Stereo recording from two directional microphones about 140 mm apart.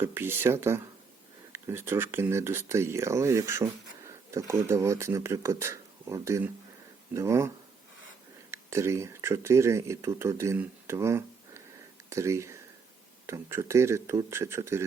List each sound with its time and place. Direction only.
0.0 s speech: 15° right (ahead or behind)